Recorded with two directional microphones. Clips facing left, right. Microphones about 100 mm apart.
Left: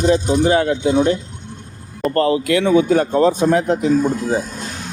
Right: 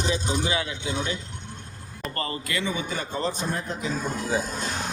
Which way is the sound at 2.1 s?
65° left (ahead or behind).